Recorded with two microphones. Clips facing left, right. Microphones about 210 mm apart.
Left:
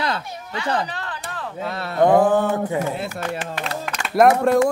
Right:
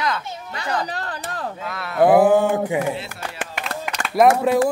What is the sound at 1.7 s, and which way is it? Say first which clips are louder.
Speech: left 3 dB; 30° left (ahead or behind).